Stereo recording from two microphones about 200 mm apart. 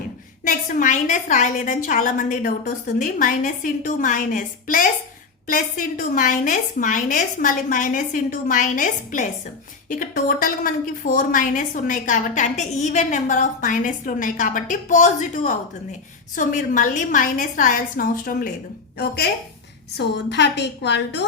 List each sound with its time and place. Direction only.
0.4 s a woman's voice: 40° left (ahead or behind)
20.0 s a woman's voice: 60° left (ahead or behind)